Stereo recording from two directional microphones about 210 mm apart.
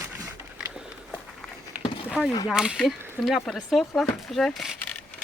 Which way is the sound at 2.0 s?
Centre (ahead or behind).